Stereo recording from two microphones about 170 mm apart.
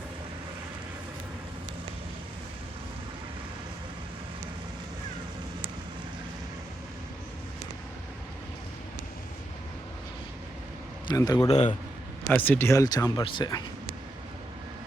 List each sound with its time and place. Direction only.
11.1 s speech: 20° left (ahead or behind)
11.4 s a man's voice: 40° left (ahead or behind)
12.3 s speech: 10° left (ahead or behind)